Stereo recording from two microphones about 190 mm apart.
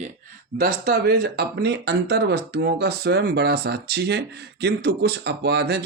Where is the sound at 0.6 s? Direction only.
50° right (ahead or behind).